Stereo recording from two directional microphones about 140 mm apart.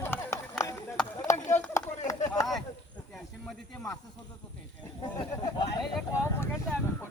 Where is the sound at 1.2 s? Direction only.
60° left (ahead or behind).